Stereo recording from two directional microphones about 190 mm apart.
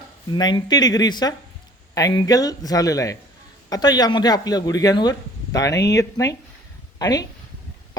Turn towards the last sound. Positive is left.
turn(degrees=20)  # may be behind; listen again after turning